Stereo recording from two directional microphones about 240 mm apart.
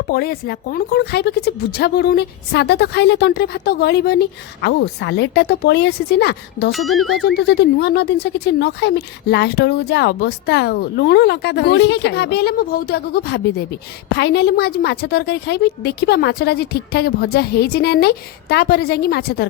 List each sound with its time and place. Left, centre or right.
0.1 s speech: left
6.7 s speech: centre
7.3 s a woman's voice: left